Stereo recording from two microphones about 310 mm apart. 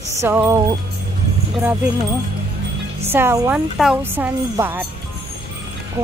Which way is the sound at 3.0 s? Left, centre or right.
Centre.